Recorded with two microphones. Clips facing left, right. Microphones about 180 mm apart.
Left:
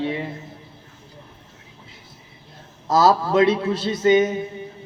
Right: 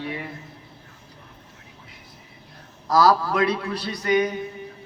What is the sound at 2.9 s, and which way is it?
A man's voice, 25° left (ahead or behind).